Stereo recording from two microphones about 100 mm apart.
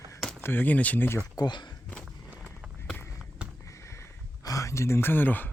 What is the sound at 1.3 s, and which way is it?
Speech, 45° left (ahead or behind).